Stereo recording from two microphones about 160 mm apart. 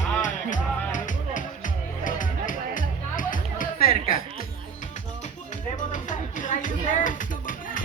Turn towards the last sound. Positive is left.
turn(degrees=60)  # may be behind; listen again after turning